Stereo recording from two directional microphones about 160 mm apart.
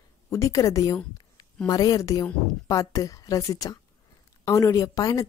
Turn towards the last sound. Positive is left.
turn(degrees=20)  # may be behind; listen again after turning